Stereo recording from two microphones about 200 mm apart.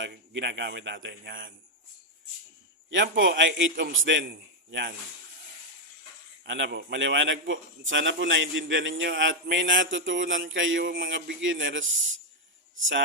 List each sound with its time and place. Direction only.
0.0 s a man's voice: 60° right (ahead or behind)
2.9 s a man's voice: 65° right (ahead or behind)
6.4 s a man's voice: 60° right (ahead or behind)